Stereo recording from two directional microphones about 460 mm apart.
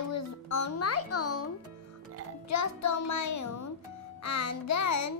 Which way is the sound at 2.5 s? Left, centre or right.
Left.